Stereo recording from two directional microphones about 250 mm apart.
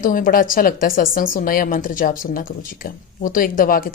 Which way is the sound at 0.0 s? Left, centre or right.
Left.